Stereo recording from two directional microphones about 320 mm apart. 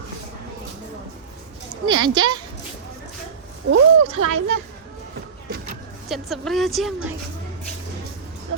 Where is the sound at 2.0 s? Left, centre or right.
Centre.